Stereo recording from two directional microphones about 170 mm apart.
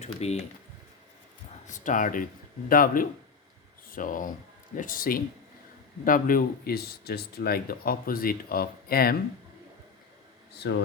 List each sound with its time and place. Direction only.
0.0 s speech: 40° left (ahead or behind)
1.6 s speech: 50° left (ahead or behind)
10.6 s speech: 90° left